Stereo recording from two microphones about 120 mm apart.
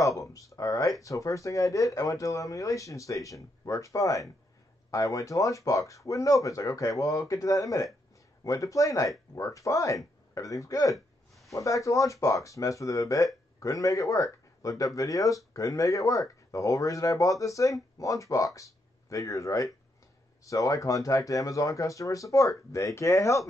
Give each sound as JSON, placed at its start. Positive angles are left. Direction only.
{"t": 0.0, "sound": "a man's voice", "side_deg": 25}